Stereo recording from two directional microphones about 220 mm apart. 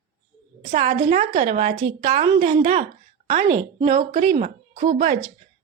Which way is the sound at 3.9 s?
35° right (ahead or behind).